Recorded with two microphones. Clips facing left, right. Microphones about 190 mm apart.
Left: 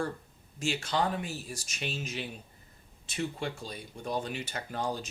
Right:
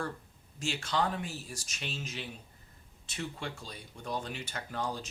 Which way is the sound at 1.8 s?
10° left (ahead or behind).